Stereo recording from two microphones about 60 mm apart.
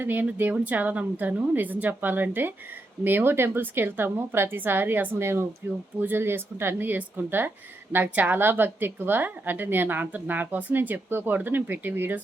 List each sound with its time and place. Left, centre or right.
0.0 s a woman's voice: right